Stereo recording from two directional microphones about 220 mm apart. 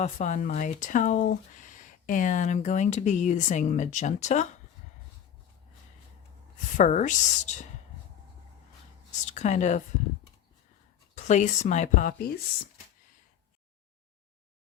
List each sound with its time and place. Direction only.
0.0 s speech: 35° left (ahead or behind)
6.7 s speech: 35° left (ahead or behind)
9.2 s speech: 35° left (ahead or behind)
11.1 s speech: 35° left (ahead or behind)